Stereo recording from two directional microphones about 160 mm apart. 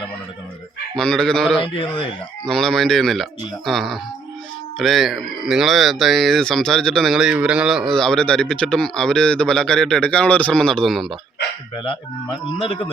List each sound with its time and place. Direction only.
0.9 s speech: 5° left (ahead or behind)
1.5 s speech: 30° left (ahead or behind)
2.4 s speech: 5° left (ahead or behind)
11.8 s speech: 30° left (ahead or behind)